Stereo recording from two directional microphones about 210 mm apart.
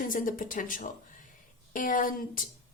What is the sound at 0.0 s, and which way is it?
A woman's voice, 40° left (ahead or behind).